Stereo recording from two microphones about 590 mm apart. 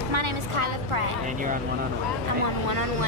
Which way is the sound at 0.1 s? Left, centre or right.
Right.